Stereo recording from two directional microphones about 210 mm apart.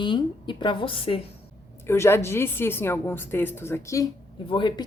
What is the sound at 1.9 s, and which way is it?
A woman's voice, 10° left (ahead or behind).